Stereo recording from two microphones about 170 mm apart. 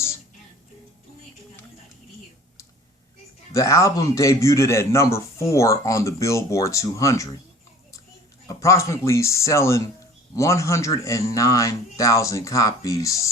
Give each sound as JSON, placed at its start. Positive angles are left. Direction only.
{"t": 3.5, "sound": "a man's voice", "side_deg": 20}
{"t": 8.4, "sound": "a man's voice", "side_deg": 15}